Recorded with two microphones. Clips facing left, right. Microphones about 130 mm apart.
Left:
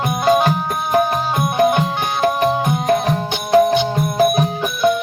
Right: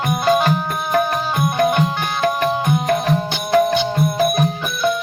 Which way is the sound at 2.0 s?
20° left (ahead or behind).